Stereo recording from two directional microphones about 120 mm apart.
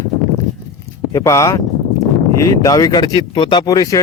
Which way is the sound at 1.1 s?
25° left (ahead or behind).